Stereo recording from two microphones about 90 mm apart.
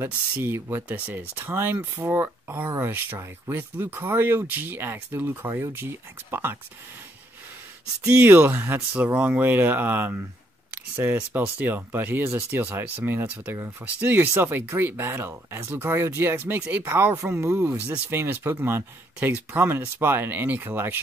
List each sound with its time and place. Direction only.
0.0 s speech: 25° right (ahead or behind)
8.2 s speech: 25° right (ahead or behind)
17.4 s speech: 30° right (ahead or behind)